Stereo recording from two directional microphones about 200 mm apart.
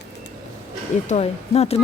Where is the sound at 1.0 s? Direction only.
35° left (ahead or behind).